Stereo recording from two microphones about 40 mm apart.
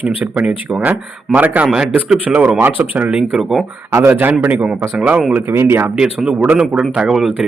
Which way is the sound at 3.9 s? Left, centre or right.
Right.